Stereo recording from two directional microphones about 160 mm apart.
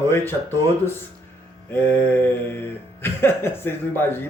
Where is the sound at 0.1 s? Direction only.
15° left (ahead or behind).